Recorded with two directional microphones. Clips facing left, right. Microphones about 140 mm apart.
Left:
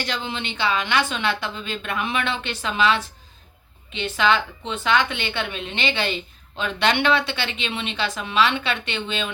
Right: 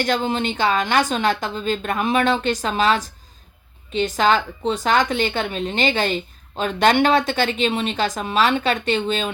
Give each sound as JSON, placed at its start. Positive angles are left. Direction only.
{"t": 0.0, "sound": "a woman's voice", "side_deg": -45}